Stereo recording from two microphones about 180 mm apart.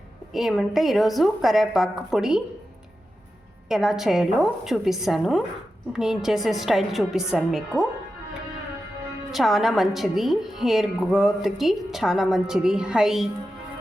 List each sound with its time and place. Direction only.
0.3 s a woman's voice: centre (ahead or behind)
3.7 s a woman's voice: centre (ahead or behind)
9.3 s a woman's voice: centre (ahead or behind)